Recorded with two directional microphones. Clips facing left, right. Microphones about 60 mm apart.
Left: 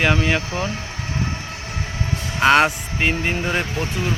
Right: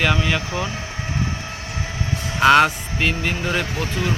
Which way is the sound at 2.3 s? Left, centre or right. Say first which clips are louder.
Right 1 dB; centre.